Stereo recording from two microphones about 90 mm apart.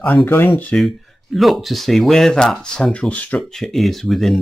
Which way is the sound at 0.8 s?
Centre (ahead or behind).